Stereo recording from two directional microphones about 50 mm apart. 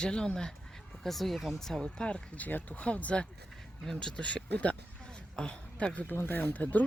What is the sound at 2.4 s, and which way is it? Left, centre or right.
Speech, left.